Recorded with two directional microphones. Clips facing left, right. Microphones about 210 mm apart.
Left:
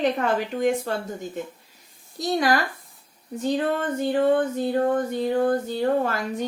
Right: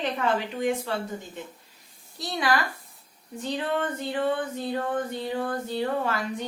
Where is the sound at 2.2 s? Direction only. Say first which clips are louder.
Left 4 dB; 45° left (ahead or behind).